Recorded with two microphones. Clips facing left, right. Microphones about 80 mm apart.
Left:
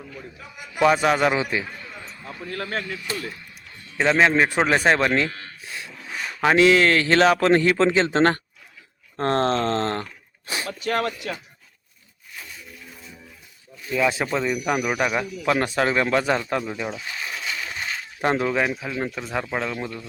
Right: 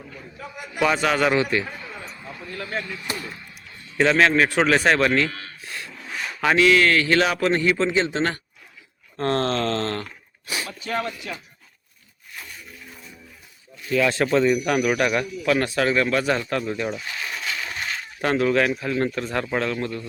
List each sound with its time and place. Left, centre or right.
0.4 s a man's voice: centre
0.9 s speech: centre
2.5 s speech: left
3.9 s speech: centre
6.4 s a man's voice: left
9.1 s speech: left
10.8 s speech: left
13.9 s speech: centre
15.4 s speech: left
16.6 s speech: centre
18.2 s speech: left